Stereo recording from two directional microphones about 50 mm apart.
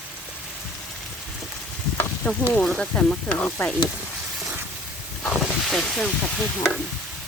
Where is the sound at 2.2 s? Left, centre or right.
Left.